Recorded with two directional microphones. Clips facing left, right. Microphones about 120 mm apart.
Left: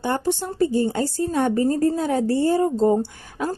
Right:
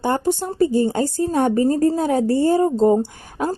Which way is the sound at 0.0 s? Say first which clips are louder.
Right 3 dB; 45° right (ahead or behind).